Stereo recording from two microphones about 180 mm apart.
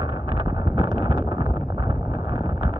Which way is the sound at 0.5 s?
25° right (ahead or behind).